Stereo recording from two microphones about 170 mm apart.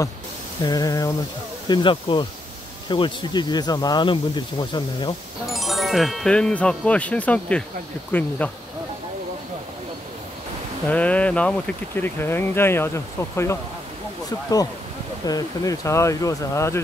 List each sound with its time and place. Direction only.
0.7 s speech: 20° left (ahead or behind)
5.5 s speech: centre (ahead or behind)
10.9 s speech: 10° left (ahead or behind)
15.2 s speech: 20° left (ahead or behind)